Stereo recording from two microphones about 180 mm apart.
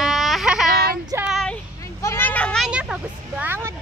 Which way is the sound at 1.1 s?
5° right (ahead or behind).